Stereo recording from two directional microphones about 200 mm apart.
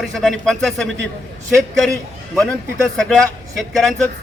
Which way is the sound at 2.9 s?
Centre (ahead or behind).